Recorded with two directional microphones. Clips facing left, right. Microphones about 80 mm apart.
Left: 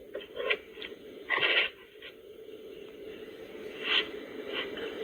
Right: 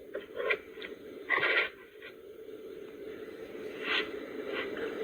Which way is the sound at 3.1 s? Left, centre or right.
Right.